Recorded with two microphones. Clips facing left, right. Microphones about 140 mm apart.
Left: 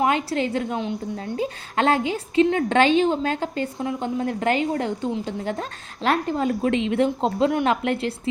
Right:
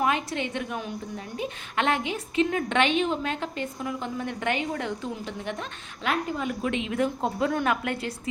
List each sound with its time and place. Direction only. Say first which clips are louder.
0.0 s a woman's voice: left 5 dB; 30° left (ahead or behind)